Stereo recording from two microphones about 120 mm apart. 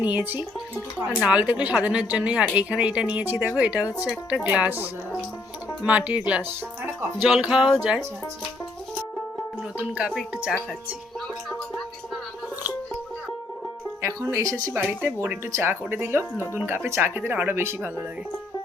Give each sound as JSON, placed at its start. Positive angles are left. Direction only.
{"t": 0.0, "sound": "speech", "side_deg": -10}
{"t": 9.9, "sound": "speech", "side_deg": -5}
{"t": 14.0, "sound": "speech", "side_deg": -25}